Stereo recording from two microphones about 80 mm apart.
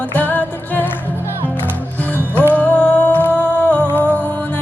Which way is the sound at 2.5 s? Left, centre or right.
Centre.